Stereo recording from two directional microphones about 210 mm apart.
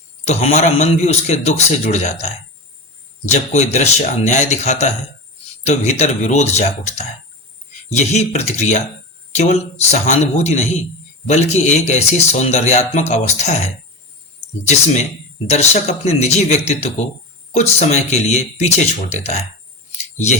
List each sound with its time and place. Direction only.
0.3 s a man's voice: 30° left (ahead or behind)
15.4 s a man's voice: 30° left (ahead or behind)